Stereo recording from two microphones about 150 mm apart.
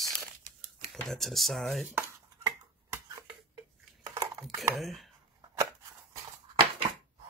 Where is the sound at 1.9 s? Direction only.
15° right (ahead or behind).